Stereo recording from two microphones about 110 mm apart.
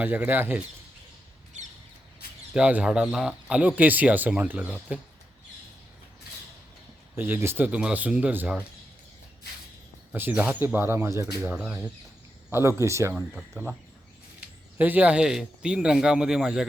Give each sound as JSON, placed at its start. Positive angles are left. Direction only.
{"t": 0.0, "sound": "speech", "side_deg": -15}
{"t": 1.5, "sound": "a sound", "side_deg": -90}
{"t": 2.5, "sound": "speech", "side_deg": -10}
{"t": 7.2, "sound": "speech", "side_deg": -20}
{"t": 10.1, "sound": "speech", "side_deg": -15}
{"t": 13.3, "sound": "speech", "side_deg": 0}
{"t": 14.4, "sound": "speech", "side_deg": -15}